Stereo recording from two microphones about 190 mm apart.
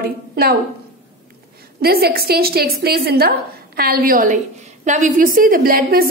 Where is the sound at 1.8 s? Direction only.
55° right (ahead or behind).